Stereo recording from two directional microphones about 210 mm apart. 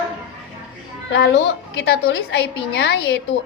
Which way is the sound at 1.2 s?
55° left (ahead or behind).